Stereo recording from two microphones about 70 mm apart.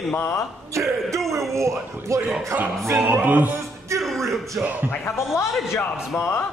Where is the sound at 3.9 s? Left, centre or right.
Centre.